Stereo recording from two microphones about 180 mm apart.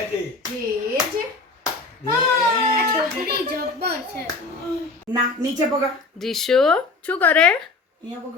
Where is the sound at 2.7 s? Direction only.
60° right (ahead or behind).